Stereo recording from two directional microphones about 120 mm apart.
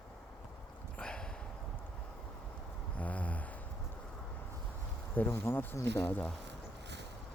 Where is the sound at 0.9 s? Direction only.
10° left (ahead or behind).